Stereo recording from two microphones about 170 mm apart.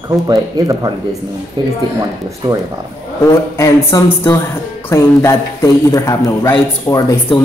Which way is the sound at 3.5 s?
15° left (ahead or behind).